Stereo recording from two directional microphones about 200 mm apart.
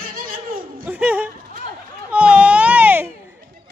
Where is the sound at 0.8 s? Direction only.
5° right (ahead or behind).